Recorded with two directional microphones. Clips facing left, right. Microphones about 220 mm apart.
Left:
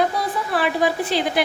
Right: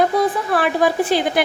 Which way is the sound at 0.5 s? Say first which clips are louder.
Right 2 dB; 50° right (ahead or behind).